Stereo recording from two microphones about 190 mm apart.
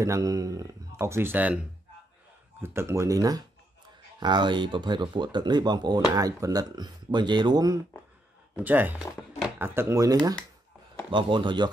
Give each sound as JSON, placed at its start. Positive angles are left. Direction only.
{"t": 0.0, "sound": "speech", "side_deg": -15}
{"t": 2.6, "sound": "speech", "side_deg": -15}
{"t": 8.5, "sound": "speech", "side_deg": -10}